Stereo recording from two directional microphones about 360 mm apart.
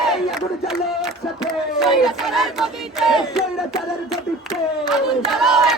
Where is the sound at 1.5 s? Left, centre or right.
Centre.